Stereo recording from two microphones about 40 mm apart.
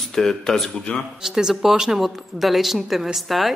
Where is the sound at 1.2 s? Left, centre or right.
Centre.